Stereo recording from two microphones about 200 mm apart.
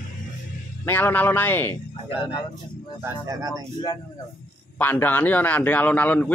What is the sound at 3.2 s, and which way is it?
Speech, 15° right (ahead or behind).